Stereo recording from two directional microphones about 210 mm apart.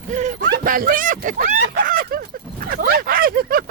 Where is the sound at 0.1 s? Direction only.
35° right (ahead or behind).